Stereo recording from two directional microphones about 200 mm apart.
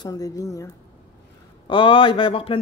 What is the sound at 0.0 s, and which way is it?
Speech, 15° left (ahead or behind).